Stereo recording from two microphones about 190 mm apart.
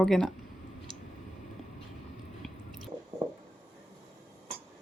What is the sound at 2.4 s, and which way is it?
Squish, centre (ahead or behind).